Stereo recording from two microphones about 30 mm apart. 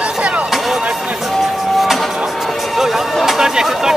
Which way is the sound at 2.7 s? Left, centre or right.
Centre.